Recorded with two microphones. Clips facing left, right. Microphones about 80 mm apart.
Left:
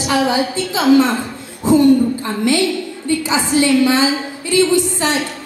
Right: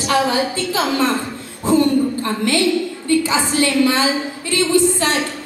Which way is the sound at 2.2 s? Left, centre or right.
Centre.